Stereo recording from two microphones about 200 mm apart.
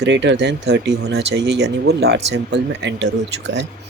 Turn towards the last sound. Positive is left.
turn(degrees=-60)  # may be behind; listen again after turning